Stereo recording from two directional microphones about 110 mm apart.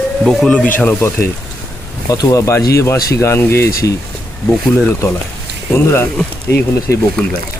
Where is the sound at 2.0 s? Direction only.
35° left (ahead or behind).